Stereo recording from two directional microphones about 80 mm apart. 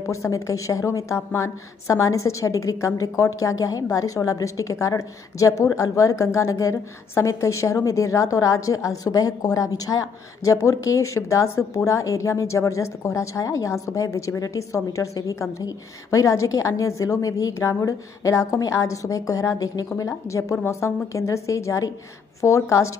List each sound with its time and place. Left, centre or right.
0.0 s a woman's voice: left
20.0 s a woman's voice: left